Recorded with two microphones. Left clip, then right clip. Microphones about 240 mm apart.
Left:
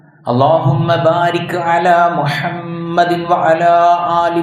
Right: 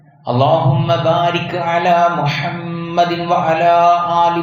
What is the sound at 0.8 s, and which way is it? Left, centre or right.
Mantra, left.